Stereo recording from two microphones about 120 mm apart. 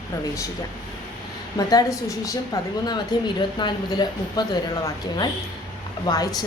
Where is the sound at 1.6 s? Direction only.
35° left (ahead or behind).